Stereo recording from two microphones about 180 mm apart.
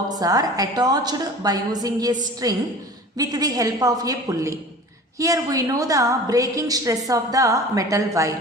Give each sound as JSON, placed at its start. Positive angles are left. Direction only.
{"t": 0.2, "sound": "a woman's voice", "side_deg": -20}